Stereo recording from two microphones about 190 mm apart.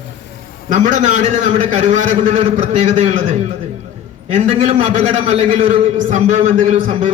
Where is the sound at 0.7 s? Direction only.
40° right (ahead or behind).